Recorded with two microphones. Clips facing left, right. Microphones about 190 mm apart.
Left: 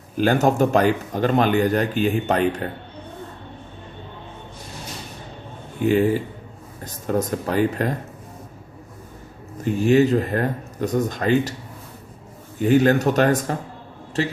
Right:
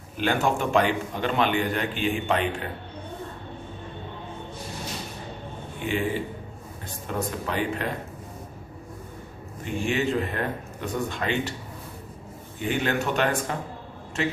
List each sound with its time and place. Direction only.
0.2 s speech: 40° left (ahead or behind)
5.8 s speech: 40° left (ahead or behind)
9.6 s speech: 40° left (ahead or behind)
12.5 s speech: 40° left (ahead or behind)